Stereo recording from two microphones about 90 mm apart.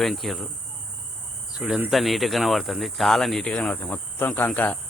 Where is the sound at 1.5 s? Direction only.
5° right (ahead or behind).